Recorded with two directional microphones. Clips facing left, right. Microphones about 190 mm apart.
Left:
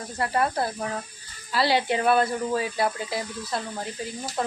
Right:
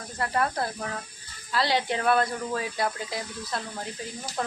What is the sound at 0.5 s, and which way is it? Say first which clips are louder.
Speech: left 3 dB; 25° left (ahead or behind).